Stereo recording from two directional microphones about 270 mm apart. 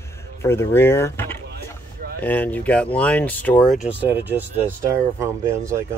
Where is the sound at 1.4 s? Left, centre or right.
Right.